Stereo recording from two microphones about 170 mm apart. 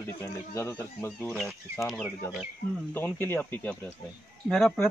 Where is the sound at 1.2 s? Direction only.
Centre (ahead or behind).